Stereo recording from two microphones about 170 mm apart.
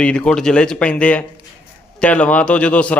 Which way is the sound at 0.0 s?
5° left (ahead or behind).